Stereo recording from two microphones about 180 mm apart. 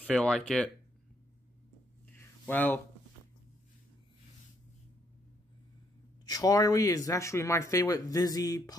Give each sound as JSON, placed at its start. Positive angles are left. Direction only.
{"t": 0.2, "sound": "speech", "side_deg": 5}
{"t": 2.1, "sound": "a sound", "side_deg": 10}
{"t": 6.2, "sound": "speech", "side_deg": 20}